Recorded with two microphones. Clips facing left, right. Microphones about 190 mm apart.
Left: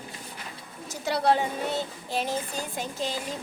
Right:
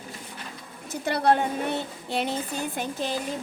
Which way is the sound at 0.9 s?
55° right (ahead or behind).